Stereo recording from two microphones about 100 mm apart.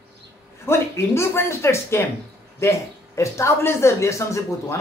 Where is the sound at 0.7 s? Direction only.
25° left (ahead or behind).